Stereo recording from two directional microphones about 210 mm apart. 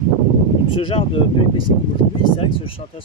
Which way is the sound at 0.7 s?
25° left (ahead or behind).